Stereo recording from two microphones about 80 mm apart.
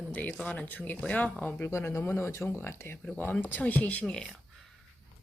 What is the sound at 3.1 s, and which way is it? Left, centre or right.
Speech, centre.